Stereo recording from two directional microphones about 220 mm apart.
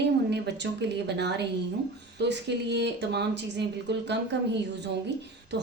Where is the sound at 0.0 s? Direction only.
50° right (ahead or behind).